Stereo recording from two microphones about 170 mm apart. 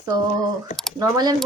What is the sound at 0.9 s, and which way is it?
Speech, 20° right (ahead or behind).